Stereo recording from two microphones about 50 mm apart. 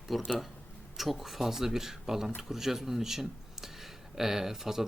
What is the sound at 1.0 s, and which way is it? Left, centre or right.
Speech, centre.